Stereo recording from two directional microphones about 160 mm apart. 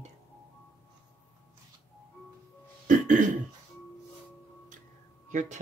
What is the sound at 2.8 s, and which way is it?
Cough, 50° right (ahead or behind).